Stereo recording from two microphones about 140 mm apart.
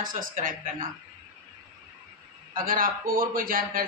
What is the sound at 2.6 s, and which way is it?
A man's voice, 85° right.